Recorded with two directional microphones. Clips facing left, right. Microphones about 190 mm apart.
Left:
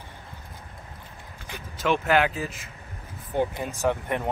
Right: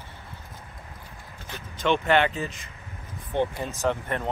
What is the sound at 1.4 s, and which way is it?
Speech, 10° left (ahead or behind).